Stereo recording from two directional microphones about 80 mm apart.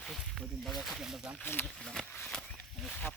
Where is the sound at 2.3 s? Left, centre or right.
Centre.